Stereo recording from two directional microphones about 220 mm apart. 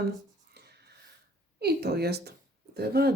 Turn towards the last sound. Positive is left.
turn(degrees=-45)  # may be behind; listen again after turning